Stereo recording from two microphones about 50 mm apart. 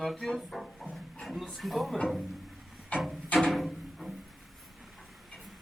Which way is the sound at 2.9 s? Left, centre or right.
Left.